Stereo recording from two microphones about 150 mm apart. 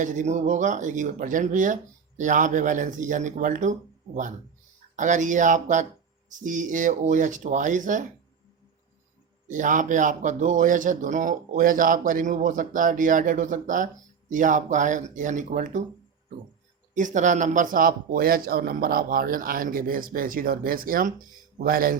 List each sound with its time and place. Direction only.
0.0 s speech: 55° right (ahead or behind)
9.5 s speech: 60° right (ahead or behind)
16.9 s speech: 55° right (ahead or behind); by 21.9 s 75° right (ahead or behind)